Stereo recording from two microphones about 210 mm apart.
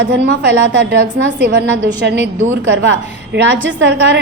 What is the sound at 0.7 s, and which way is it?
A woman's voice, 60° right (ahead or behind).